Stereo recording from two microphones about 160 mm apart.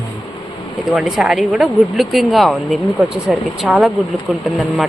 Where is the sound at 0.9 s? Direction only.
5° right (ahead or behind).